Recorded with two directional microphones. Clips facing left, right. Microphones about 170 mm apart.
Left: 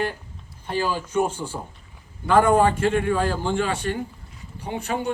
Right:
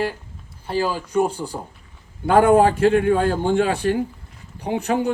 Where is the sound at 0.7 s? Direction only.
35° right (ahead or behind).